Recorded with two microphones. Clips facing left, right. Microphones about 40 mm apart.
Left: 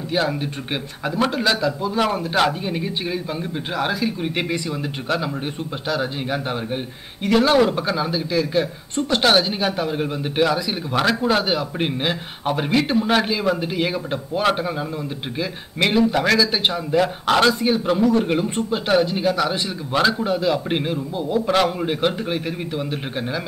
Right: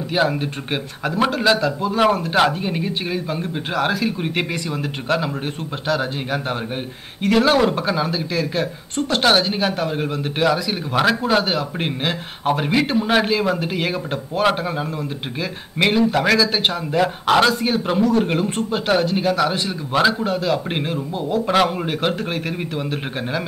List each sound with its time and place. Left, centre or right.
0.1 s a man's voice: centre
1.0 s a man's voice: centre
5.9 s a man's voice: centre
15.8 s a man's voice: centre